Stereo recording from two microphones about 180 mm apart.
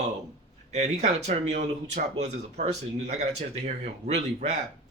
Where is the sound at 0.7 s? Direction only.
40° right (ahead or behind).